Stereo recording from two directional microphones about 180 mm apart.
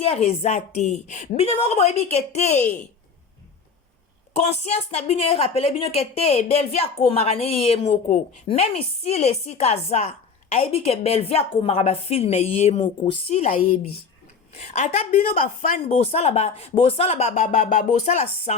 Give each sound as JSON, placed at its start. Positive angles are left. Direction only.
{"t": 0.0, "sound": "a woman's voice", "side_deg": 35}
{"t": 4.4, "sound": "a woman's voice", "side_deg": 35}